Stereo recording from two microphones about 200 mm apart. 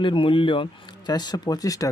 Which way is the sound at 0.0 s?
25° left (ahead or behind).